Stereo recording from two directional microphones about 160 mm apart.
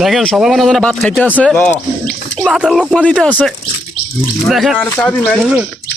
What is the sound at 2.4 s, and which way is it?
Speech, 5° right (ahead or behind).